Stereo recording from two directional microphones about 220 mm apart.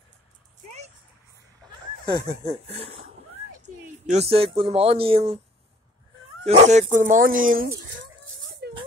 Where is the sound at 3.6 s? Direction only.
30° right (ahead or behind).